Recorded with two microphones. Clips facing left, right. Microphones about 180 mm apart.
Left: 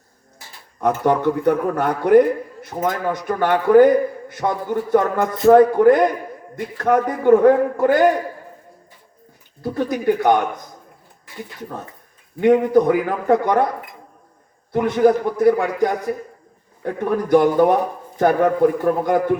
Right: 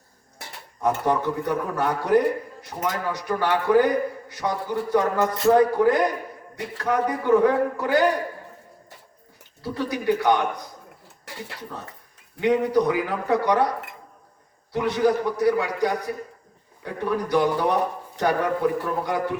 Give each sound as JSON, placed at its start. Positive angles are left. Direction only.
{"t": 0.8, "sound": "a man's voice", "side_deg": 60}
{"t": 9.6, "sound": "a man's voice", "side_deg": 45}
{"t": 11.3, "sound": "a sound", "side_deg": -75}
{"t": 12.4, "sound": "a man's voice", "side_deg": 50}
{"t": 14.7, "sound": "a man's voice", "side_deg": 50}